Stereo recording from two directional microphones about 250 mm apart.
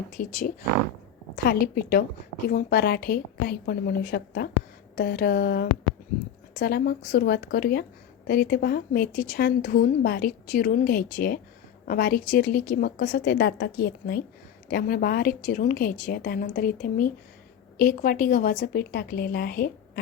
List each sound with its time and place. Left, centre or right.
0.2 s speech: left